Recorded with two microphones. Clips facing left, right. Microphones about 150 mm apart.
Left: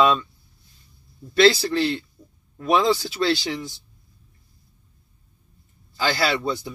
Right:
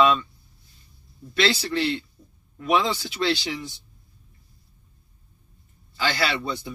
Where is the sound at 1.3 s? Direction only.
40° left (ahead or behind).